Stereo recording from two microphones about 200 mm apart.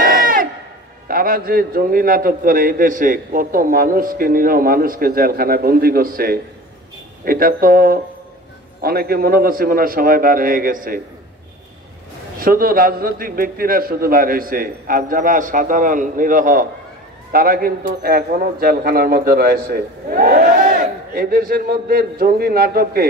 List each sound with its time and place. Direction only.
0.0 s a sound: 45° right (ahead or behind)
1.0 s a man's voice: 45° right (ahead or behind)
12.4 s a man's voice: 45° right (ahead or behind)